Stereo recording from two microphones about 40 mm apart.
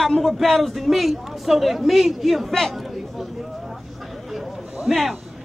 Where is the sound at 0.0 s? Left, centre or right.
Centre.